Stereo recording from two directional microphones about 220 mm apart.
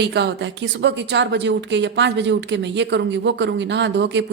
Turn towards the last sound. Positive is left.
turn(degrees=-55)  # may be behind; listen again after turning